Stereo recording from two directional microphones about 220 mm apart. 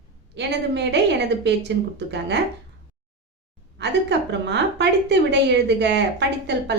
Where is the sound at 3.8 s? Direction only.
50° right (ahead or behind).